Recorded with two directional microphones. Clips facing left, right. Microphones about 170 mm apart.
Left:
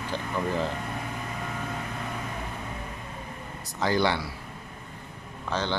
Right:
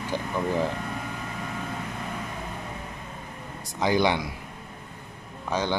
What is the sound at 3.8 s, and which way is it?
Speech, 15° right (ahead or behind).